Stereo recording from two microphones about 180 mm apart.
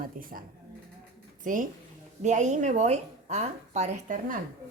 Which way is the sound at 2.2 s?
40° right (ahead or behind).